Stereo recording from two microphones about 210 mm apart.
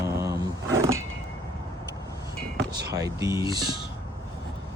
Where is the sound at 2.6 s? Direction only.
50° right (ahead or behind).